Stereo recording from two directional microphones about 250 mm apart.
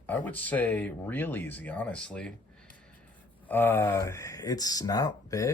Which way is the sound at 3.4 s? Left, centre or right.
Centre.